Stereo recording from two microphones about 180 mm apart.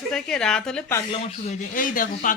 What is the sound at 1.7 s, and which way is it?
Speech, 50° left (ahead or behind).